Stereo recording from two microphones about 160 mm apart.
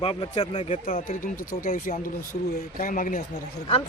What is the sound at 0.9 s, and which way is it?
Speech, 60° left (ahead or behind).